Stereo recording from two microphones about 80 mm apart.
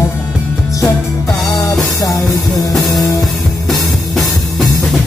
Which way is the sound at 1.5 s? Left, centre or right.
Left.